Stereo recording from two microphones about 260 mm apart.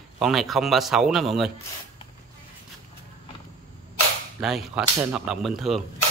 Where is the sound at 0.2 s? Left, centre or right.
Centre.